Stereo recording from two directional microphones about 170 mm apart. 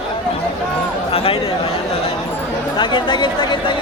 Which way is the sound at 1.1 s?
35° left (ahead or behind).